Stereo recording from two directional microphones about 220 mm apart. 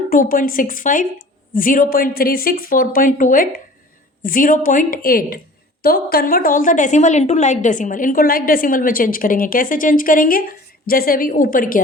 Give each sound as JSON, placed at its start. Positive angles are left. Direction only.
{"t": 0.1, "sound": "a woman's voice", "side_deg": 40}